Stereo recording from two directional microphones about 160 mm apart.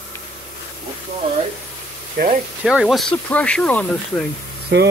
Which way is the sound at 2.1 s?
55° right (ahead or behind).